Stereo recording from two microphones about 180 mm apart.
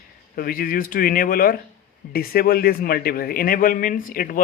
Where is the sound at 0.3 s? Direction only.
55° left (ahead or behind).